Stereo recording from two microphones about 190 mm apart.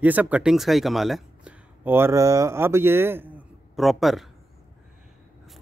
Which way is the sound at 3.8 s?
Centre (ahead or behind).